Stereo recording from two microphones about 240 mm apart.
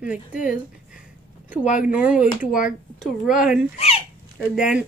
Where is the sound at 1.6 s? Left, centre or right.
Left.